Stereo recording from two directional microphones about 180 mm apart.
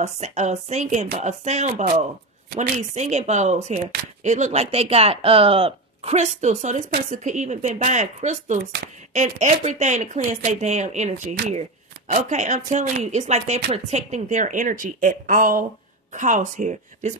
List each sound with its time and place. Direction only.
0.0 s a woman's voice: 40° right (ahead or behind)